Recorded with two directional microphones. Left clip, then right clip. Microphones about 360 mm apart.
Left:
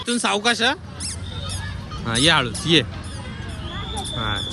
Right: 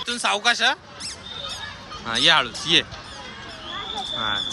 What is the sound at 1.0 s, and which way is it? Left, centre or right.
Goose, centre.